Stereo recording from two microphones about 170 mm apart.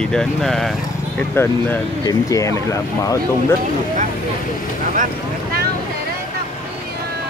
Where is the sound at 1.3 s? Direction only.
15° left (ahead or behind).